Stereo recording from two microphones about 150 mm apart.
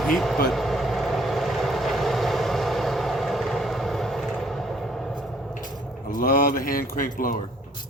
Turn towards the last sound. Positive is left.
turn(degrees=65)  # may be behind; listen again after turning